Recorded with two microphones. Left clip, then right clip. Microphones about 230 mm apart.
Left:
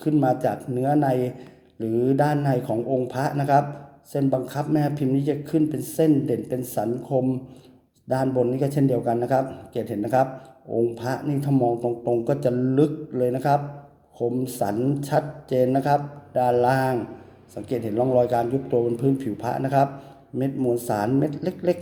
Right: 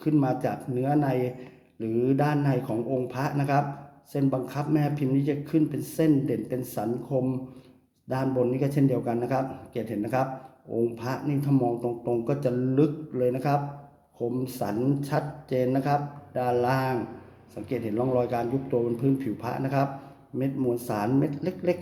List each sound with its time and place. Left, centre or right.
0.0 s a man's voice: centre